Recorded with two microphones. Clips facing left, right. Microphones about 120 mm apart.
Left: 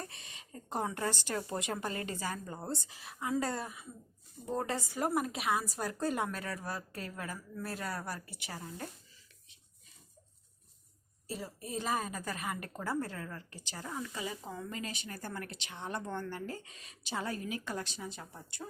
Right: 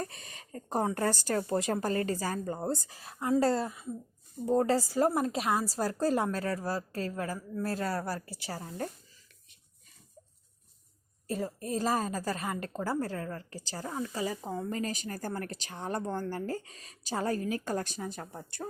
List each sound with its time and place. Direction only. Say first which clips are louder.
0.0 s a woman's voice: right 7 dB; 40° right (ahead or behind)
11.3 s a woman's voice: right 8 dB; 45° right (ahead or behind)